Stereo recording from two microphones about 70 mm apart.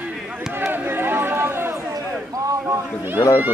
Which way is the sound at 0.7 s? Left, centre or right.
Right.